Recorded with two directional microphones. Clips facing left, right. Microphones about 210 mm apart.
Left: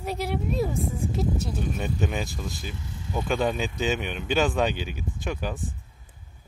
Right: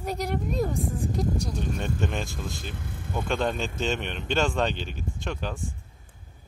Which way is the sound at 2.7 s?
55° right (ahead or behind).